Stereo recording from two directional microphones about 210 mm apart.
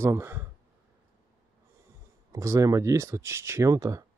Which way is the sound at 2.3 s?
15° right (ahead or behind).